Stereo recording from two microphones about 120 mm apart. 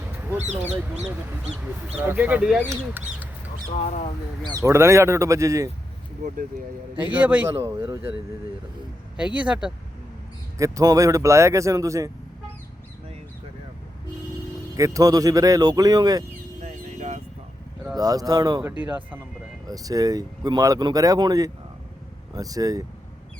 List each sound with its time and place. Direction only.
0.5 s speech: 10° right (ahead or behind)
2.0 s speech: 15° right (ahead or behind)
3.8 s speech: 70° left (ahead or behind)
4.5 s speech: 25° right (ahead or behind)
7.1 s speech: 10° right (ahead or behind)
7.6 s speech: 20° right (ahead or behind)
9.1 s speech: 10° right (ahead or behind)
10.6 s speech: 30° right (ahead or behind)
14.8 s speech: 25° right (ahead or behind)
16.6 s a sound: 75° right (ahead or behind)
17.9 s speech: 30° right (ahead or behind)
19.6 s speech: 30° right (ahead or behind)